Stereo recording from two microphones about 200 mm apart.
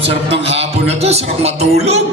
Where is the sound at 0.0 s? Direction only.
30° right (ahead or behind).